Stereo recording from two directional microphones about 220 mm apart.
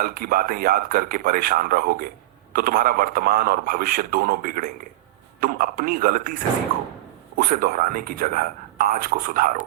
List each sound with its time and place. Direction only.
0.0 s a man's voice: 40° right (ahead or behind)